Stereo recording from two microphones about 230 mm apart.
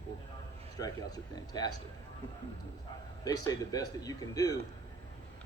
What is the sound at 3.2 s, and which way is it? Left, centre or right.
Speech, centre.